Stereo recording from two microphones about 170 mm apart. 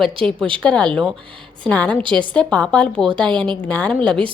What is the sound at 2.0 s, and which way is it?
Speech, 30° right (ahead or behind).